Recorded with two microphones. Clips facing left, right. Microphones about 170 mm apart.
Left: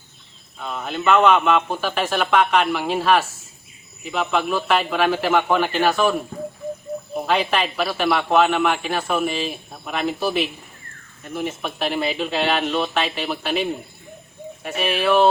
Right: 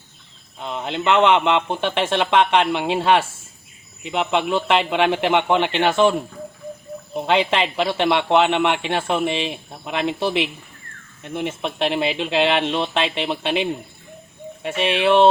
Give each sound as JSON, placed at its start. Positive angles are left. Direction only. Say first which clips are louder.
{"t": 0.6, "sound": "a man's voice", "louder": "even", "side_deg": -25}
{"t": 7.3, "sound": "a man's voice", "louder": "right 2 dB", "side_deg": -25}